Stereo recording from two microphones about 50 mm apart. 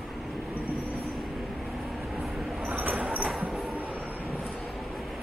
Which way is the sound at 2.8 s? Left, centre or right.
Right.